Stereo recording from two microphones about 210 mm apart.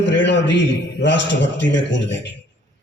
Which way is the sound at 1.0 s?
60° left (ahead or behind).